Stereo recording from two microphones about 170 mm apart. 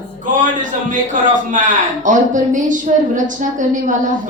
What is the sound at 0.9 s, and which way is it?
A man's voice, 50° right (ahead or behind).